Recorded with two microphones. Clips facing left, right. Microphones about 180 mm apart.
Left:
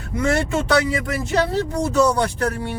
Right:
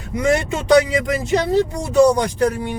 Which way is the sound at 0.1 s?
15° right (ahead or behind).